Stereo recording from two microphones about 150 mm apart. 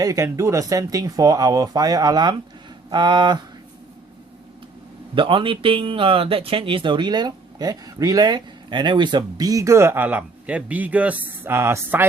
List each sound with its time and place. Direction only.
0.0 s speech: 20° right (ahead or behind)
5.1 s speech: 35° right (ahead or behind); by 12.0 s 15° right (ahead or behind)